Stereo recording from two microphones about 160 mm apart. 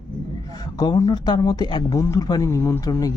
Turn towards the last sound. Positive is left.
turn(degrees=20)  # may be behind; listen again after turning